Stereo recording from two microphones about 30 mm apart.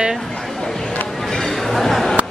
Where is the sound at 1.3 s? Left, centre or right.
Centre.